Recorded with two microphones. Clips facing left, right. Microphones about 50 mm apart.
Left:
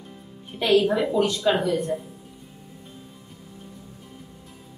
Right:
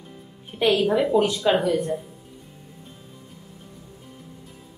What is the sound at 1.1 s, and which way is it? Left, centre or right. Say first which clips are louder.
Speech: right 2 dB; centre.